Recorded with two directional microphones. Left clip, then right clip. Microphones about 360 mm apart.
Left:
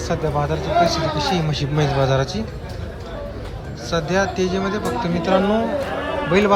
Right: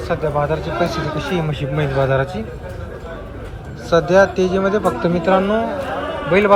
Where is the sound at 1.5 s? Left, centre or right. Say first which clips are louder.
Even; left.